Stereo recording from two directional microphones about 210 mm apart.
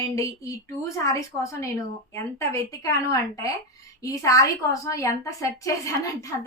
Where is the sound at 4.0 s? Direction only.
15° left (ahead or behind).